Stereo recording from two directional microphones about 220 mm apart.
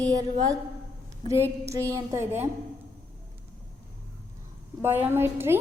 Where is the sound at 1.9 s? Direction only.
10° right (ahead or behind).